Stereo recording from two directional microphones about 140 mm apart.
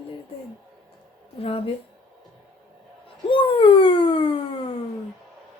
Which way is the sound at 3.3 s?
40° left (ahead or behind).